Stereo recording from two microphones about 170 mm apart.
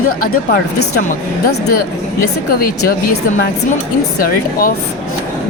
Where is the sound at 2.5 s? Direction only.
60° left (ahead or behind).